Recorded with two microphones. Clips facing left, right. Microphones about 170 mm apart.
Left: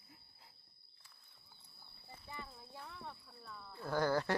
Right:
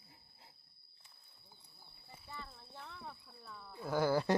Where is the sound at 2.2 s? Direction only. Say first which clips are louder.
Even; 10° left (ahead or behind); by 4.3 s 10° right (ahead or behind).